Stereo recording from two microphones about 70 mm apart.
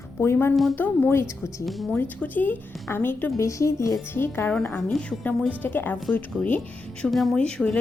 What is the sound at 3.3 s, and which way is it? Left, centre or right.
Speech, left.